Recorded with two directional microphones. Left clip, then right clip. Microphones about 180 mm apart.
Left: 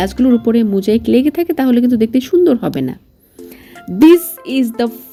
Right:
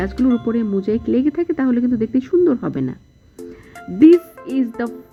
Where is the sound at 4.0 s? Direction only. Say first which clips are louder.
Left 3 dB; 20° left (ahead or behind).